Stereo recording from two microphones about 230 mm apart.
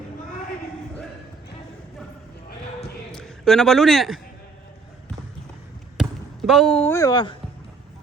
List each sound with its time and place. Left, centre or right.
3.1 s a man's voice: centre
6.0 s basketball bounce: centre